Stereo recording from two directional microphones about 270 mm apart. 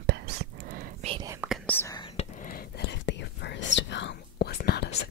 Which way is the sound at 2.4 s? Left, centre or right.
Left.